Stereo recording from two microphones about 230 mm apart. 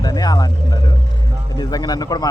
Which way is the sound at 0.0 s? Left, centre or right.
Centre.